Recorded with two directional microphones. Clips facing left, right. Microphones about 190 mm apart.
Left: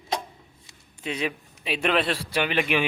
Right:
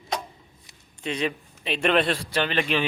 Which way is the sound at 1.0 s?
5° left (ahead or behind).